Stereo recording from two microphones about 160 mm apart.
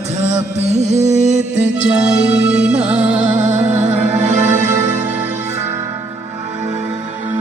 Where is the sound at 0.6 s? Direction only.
45° right (ahead or behind).